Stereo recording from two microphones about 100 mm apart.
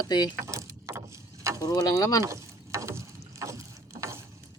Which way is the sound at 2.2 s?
30° right (ahead or behind).